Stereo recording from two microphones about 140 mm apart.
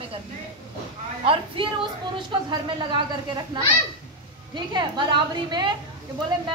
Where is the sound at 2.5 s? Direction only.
35° right (ahead or behind).